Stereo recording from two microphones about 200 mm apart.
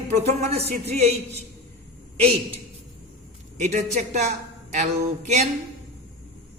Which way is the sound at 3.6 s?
35° right (ahead or behind).